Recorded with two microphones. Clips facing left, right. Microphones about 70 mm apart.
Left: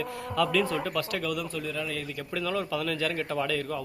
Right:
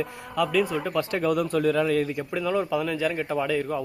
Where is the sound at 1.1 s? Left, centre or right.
Right.